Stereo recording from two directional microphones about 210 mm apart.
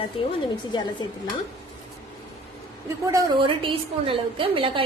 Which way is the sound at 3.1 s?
25° right (ahead or behind).